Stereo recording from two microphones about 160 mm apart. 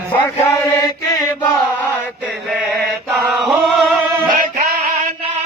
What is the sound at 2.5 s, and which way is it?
Chant, centre (ahead or behind).